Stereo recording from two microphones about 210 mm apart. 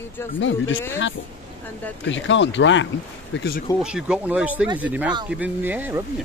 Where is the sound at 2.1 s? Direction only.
60° left (ahead or behind).